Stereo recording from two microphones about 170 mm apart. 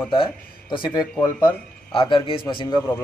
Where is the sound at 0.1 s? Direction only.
30° left (ahead or behind).